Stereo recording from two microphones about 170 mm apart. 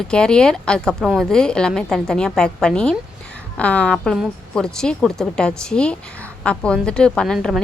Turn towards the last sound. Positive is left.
turn(degrees=0)  # may be behind; listen again after turning